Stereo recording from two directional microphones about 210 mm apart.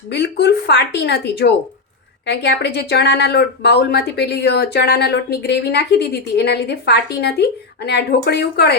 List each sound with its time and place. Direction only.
0.1 s speech: 50° left (ahead or behind)